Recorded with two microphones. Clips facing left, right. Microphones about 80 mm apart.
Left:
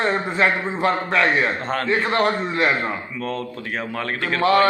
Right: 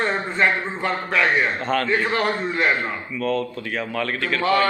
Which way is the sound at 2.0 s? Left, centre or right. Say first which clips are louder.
Left 2 dB; left.